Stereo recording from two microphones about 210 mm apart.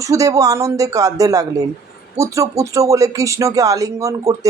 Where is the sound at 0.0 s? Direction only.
15° right (ahead or behind).